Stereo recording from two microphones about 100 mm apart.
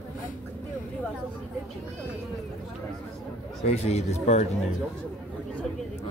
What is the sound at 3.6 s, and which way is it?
Speech, 90° left.